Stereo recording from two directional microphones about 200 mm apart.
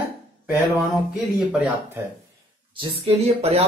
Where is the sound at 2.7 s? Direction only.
30° right (ahead or behind).